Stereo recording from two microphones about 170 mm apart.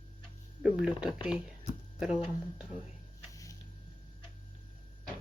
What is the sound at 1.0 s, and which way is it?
Speech, 5° right (ahead or behind).